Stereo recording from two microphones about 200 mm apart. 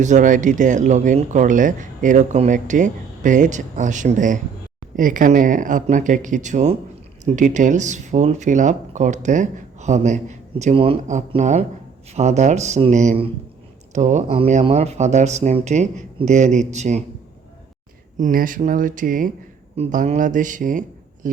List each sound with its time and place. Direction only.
0.0 s speech: 40° right (ahead or behind)
18.2 s speech: 45° right (ahead or behind)